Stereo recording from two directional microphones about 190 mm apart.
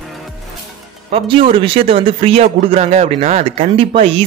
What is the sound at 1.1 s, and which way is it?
A man's voice, 30° right (ahead or behind).